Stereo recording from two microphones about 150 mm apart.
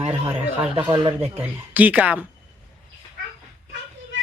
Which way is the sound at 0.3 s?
10° right (ahead or behind).